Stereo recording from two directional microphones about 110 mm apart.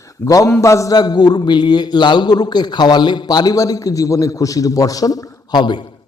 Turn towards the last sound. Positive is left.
turn(degrees=40)  # may be behind; listen again after turning